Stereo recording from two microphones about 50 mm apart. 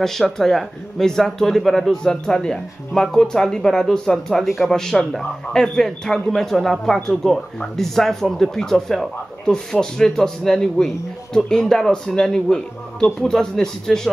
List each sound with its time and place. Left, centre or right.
0.0 s speech: centre